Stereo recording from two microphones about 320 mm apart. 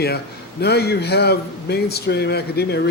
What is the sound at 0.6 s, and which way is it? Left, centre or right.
A man's voice, left.